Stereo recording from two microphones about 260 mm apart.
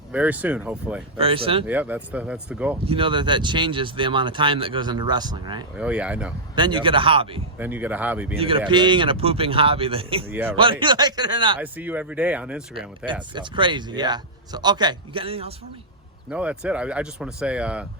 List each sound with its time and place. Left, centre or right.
0.1 s speech: centre
1.2 s speech: right
1.6 s speech: centre
2.8 s speech: centre
5.7 s speech: centre
6.6 s speech: centre
7.6 s speech: centre
8.4 s speech: right
10.2 s speech: centre
10.6 s speech: centre
11.6 s speech: centre
13.3 s speech: centre
16.3 s speech: centre